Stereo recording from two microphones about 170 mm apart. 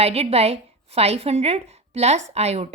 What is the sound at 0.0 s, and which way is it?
A woman's voice, 35° right (ahead or behind).